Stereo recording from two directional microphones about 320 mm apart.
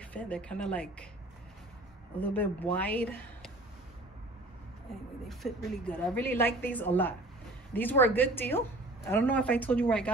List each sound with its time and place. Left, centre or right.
0.0 s a woman's voice: centre
2.1 s speech: centre
5.4 s a woman's voice: centre